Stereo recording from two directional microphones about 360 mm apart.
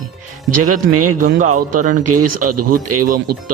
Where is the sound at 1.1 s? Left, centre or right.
Right.